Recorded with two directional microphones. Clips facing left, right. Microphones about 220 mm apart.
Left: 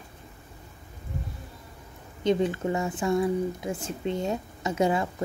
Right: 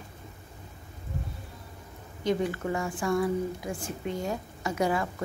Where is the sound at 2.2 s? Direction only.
20° left (ahead or behind).